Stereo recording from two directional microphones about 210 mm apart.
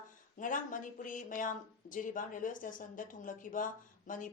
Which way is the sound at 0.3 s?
40° left (ahead or behind).